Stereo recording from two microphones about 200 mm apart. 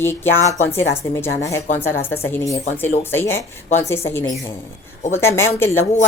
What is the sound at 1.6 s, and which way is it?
Speech, 40° left (ahead or behind).